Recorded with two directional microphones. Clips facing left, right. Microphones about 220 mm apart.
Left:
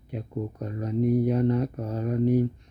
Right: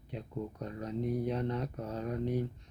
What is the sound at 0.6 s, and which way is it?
Speech, 10° left (ahead or behind).